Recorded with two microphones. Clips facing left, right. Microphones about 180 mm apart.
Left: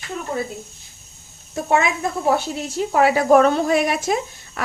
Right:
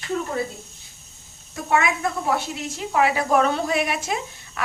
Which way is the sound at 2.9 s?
45° left (ahead or behind).